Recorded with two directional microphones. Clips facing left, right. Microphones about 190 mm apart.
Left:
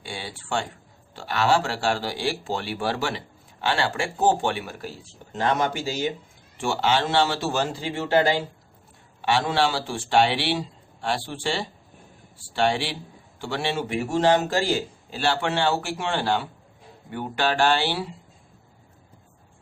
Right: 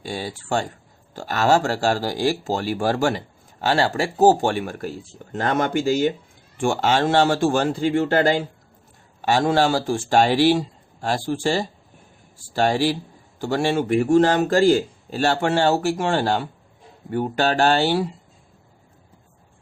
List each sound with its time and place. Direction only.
0.0 s speech: 40° right (ahead or behind)